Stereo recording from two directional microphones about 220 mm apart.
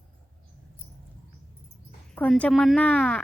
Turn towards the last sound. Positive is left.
turn(degrees=5)  # may be behind; listen again after turning